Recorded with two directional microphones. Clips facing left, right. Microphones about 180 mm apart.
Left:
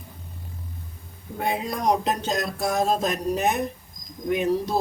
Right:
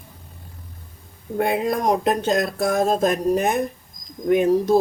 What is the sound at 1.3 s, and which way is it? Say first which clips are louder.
Speech: right 6 dB; 55° right (ahead or behind).